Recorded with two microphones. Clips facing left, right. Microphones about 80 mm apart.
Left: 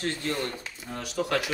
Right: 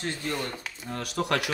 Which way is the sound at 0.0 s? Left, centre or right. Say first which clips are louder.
Left 2 dB; centre.